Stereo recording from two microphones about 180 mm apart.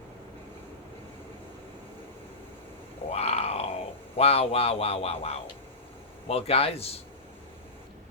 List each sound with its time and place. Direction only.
3.1 s grunt: 35° left (ahead or behind)
4.2 s speech: 35° left (ahead or behind)